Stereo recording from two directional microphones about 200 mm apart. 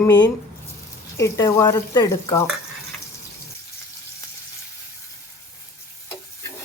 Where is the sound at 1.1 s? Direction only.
15° left (ahead or behind).